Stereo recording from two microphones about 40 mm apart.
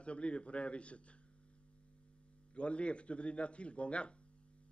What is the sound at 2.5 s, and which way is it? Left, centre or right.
A man's voice, left.